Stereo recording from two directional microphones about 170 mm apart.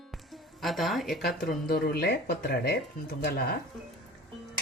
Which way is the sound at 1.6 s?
65° left (ahead or behind).